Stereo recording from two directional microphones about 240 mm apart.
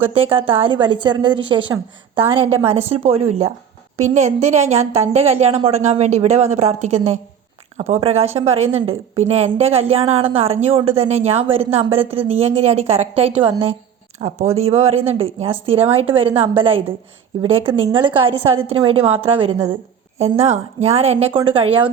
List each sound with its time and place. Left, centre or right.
0.0 s a woman's voice: right
20.4 s a woman's voice: right